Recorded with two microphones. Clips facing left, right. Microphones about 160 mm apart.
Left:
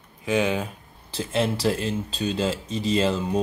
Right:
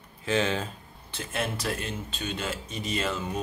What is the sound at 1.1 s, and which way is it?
Speech, 30° left (ahead or behind).